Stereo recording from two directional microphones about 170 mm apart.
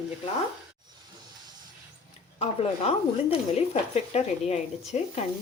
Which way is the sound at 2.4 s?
35° left (ahead or behind).